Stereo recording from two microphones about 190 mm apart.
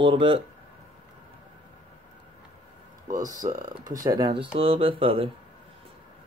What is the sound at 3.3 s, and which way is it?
Speech, 20° right (ahead or behind).